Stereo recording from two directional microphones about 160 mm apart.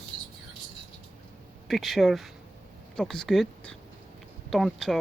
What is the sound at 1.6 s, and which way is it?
Speech, centre (ahead or behind).